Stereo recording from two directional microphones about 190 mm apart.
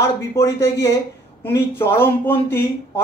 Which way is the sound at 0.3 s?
15° left (ahead or behind).